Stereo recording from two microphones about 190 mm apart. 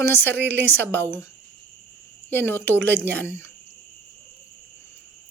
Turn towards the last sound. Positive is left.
turn(degrees=15)  # may be behind; listen again after turning